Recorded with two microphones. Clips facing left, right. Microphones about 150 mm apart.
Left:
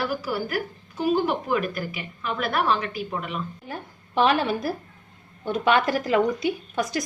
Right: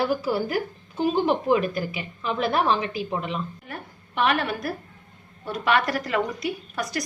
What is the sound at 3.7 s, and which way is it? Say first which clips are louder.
A woman's voice: left 5 dB; 30° left (ahead or behind).